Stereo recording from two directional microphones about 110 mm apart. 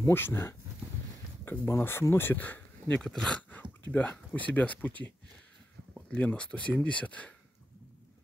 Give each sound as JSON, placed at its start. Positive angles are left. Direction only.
{"t": 0.0, "sound": "speech", "side_deg": 20}